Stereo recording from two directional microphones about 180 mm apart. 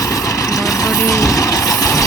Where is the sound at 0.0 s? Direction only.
15° left (ahead or behind).